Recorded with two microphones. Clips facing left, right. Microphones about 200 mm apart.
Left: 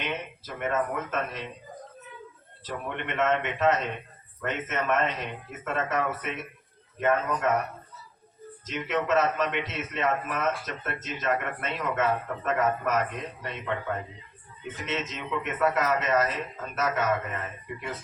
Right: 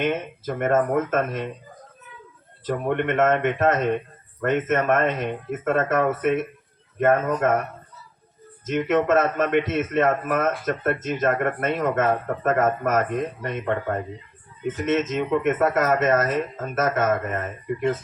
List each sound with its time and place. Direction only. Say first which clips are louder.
0.0 s a man's voice: right 9 dB; 50° right (ahead or behind)
2.6 s a man's voice: right 11 dB; 50° right (ahead or behind)
8.6 s a man's voice: right 8 dB; 50° right (ahead or behind)